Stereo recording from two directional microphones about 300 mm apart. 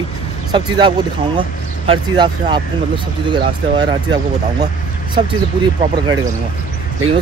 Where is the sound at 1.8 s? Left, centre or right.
Centre.